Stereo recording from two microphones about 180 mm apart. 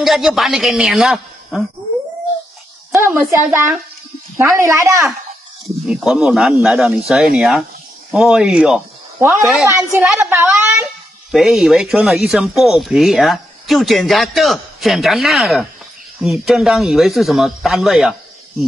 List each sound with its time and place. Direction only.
0.0 s speech: centre (ahead or behind)
2.9 s a woman's voice: 10° right (ahead or behind)
5.9 s a woman's voice: 5° right (ahead or behind)